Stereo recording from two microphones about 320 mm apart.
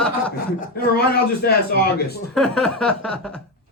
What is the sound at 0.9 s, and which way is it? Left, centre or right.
Speech, left.